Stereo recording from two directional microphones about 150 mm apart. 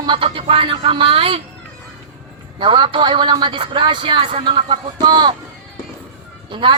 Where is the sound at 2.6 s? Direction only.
30° right (ahead or behind).